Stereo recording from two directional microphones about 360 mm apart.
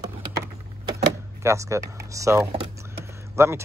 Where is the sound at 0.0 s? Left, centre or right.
Right.